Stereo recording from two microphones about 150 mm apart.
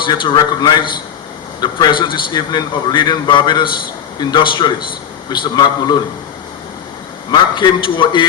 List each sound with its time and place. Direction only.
0.0 s a man's voice: 35° left (ahead or behind)
7.3 s a man's voice: 30° left (ahead or behind)